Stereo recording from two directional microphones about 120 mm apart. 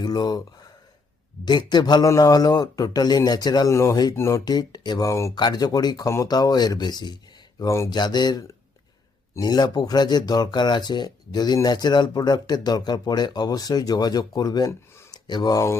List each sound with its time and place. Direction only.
0.0 s speech: 35° left (ahead or behind)
4.4 s speech: 35° left (ahead or behind)
7.6 s speech: 25° left (ahead or behind)
7.9 s speech: 35° left (ahead or behind)
14.7 s a sound: 20° left (ahead or behind)
15.1 s speech: 35° left (ahead or behind)